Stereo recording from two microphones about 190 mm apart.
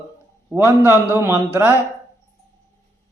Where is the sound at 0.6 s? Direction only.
15° left (ahead or behind).